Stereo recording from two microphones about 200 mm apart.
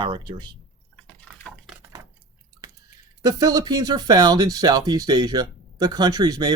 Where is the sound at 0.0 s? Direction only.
25° right (ahead or behind).